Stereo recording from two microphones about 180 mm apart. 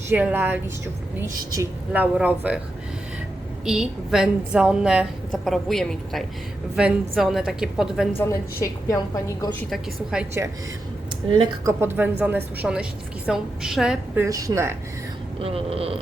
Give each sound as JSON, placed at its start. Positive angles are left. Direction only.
{"t": 0.1, "sound": "a woman's voice", "side_deg": -10}
{"t": 3.7, "sound": "a woman's voice", "side_deg": -5}
{"t": 8.2, "sound": "a woman's voice", "side_deg": 20}
{"t": 9.6, "sound": "a woman's voice", "side_deg": 0}
{"t": 11.3, "sound": "speech", "side_deg": -25}
{"t": 11.8, "sound": "a woman's voice", "side_deg": -10}
{"t": 14.3, "sound": "a woman's voice", "side_deg": -20}
{"t": 15.4, "sound": "speech", "side_deg": -30}